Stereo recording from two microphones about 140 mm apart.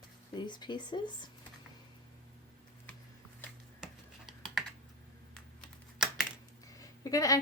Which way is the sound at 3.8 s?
5° right (ahead or behind).